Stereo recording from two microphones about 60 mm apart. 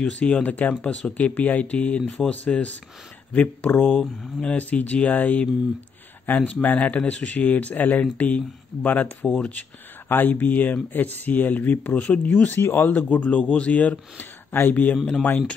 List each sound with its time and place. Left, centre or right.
0.2 s speech: left
3.8 s speech: centre
4.4 s speech: left
10.0 s speech: left
12.4 s speech: left